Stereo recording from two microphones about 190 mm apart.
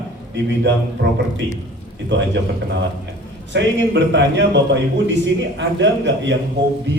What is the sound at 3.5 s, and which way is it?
A man's voice, 65° right (ahead or behind).